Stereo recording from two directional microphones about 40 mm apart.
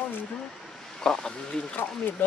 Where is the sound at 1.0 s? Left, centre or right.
Centre.